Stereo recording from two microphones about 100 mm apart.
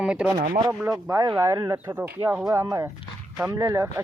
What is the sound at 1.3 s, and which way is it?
Speech, 25° right (ahead or behind).